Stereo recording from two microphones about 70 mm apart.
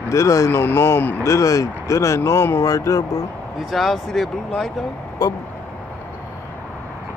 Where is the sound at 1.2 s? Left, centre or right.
Left.